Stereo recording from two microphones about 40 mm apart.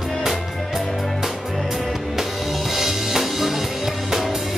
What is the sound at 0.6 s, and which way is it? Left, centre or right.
Music, centre.